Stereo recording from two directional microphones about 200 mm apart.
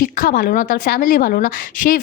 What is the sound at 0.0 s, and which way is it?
Speech, 45° left (ahead or behind).